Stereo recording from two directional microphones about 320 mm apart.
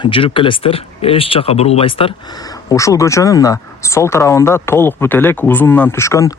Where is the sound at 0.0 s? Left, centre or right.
Centre.